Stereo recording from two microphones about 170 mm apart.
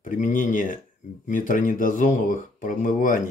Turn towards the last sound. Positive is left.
turn(degrees=50)  # may be behind; listen again after turning